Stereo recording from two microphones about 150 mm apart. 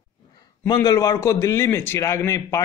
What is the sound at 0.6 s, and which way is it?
Speech, 25° left (ahead or behind).